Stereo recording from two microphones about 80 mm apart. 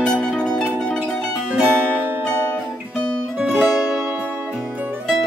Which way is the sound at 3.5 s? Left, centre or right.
Right.